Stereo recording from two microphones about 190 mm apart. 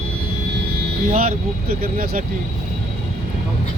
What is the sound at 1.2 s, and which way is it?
Speech, 50° right (ahead or behind).